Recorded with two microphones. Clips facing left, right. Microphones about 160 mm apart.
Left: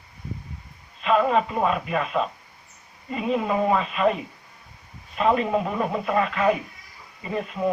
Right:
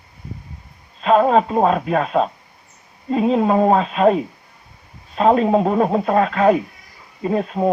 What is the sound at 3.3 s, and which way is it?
Speech, 45° right (ahead or behind).